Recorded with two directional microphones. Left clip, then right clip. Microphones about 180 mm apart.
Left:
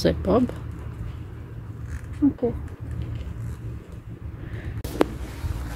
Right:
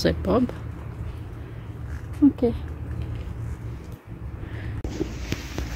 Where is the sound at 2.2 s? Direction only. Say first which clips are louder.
Right 3 dB; 35° right (ahead or behind).